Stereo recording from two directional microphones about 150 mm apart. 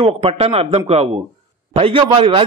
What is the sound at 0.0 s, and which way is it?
A man's voice, 40° right (ahead or behind).